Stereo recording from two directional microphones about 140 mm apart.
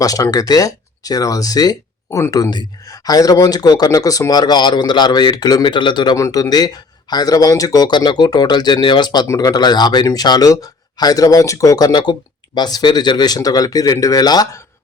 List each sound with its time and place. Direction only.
0.0 s speech: 25° left (ahead or behind)